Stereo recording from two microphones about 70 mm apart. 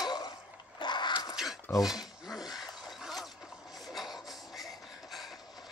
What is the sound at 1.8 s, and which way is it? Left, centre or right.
Rub, centre.